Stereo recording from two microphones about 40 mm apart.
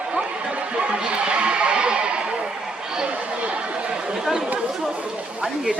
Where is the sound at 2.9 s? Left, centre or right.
Right.